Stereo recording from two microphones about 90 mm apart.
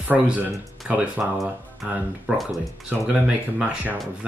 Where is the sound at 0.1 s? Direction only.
15° right (ahead or behind).